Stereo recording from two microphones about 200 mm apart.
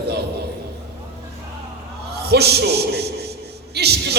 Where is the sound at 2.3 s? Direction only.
55° right (ahead or behind).